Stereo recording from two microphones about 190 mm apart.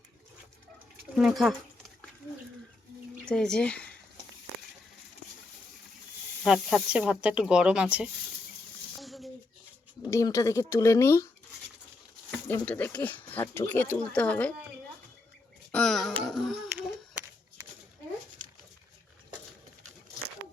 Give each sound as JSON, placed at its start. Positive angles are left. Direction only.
{"t": 1.1, "sound": "speech", "side_deg": 0}
{"t": 3.2, "sound": "speech", "side_deg": 5}
{"t": 6.4, "sound": "speech", "side_deg": 0}
{"t": 9.0, "sound": "a sound", "side_deg": 0}
{"t": 10.0, "sound": "speech", "side_deg": 20}
{"t": 12.5, "sound": "speech", "side_deg": 10}
{"t": 15.7, "sound": "a sound", "side_deg": 5}